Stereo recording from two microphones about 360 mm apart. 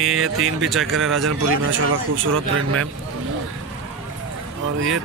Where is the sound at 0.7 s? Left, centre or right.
Centre.